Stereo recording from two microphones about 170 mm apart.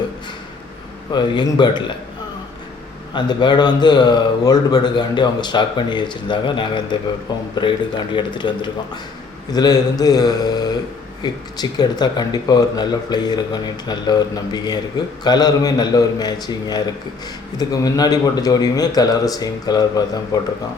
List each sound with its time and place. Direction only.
1.1 s speech: 25° left (ahead or behind)
3.1 s speech: 25° left (ahead or behind)